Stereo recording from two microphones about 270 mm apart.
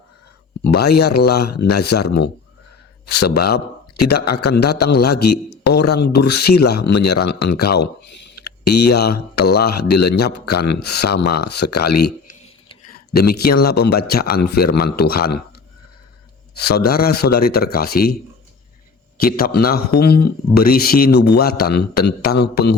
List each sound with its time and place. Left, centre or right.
0.6 s speech: left
3.3 s speech: left
8.1 s a sound: left
9.0 s speech: left
11.2 s speech: left
11.4 s speech: left
16.6 s speech: left